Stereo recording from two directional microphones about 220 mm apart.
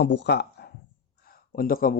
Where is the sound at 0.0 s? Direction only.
50° left (ahead or behind).